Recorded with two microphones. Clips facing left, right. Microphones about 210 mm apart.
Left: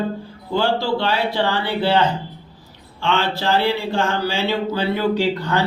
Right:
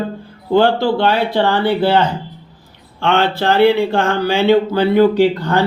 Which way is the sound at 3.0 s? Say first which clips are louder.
Right 5 dB; 60° right (ahead or behind).